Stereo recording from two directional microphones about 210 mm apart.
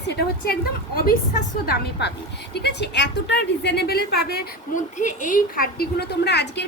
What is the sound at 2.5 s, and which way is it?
A woman's voice, 50° left (ahead or behind).